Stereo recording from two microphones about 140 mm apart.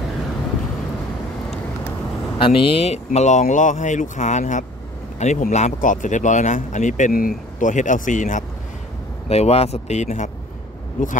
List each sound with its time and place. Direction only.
2.3 s speech: 40° left (ahead or behind); by 8.5 s 65° left (ahead or behind)
9.3 s speech: 45° left (ahead or behind)